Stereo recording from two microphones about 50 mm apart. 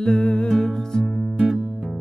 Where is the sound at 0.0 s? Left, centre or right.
Left.